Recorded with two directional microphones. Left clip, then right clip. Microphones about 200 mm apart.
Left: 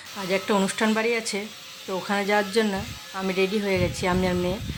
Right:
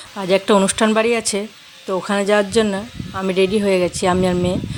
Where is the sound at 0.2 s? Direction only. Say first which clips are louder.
Right 9 dB; 40° right (ahead or behind).